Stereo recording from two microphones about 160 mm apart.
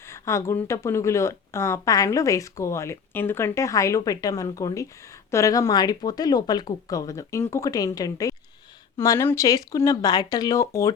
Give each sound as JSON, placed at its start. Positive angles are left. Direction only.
{"t": 0.1, "sound": "speech", "side_deg": 20}